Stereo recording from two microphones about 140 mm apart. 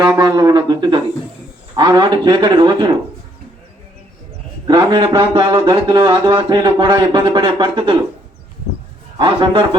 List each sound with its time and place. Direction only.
0.2 s a man's voice: 25° right (ahead or behind)
4.6 s speech: 30° right (ahead or behind)
9.1 s speech: 35° right (ahead or behind)